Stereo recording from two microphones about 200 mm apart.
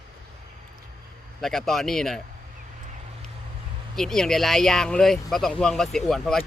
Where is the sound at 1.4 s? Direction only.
Centre (ahead or behind).